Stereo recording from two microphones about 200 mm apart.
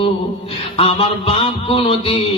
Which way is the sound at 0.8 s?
30° left (ahead or behind).